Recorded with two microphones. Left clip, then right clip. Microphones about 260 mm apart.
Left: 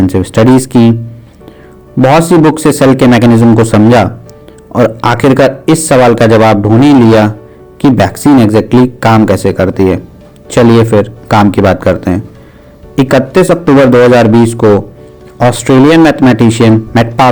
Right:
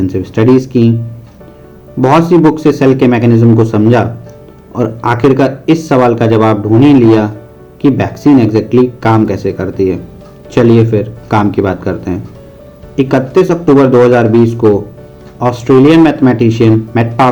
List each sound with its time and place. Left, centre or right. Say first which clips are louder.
0.1 s a man's voice: left 2 dB; left
2.0 s a man's voice: left 2 dB; left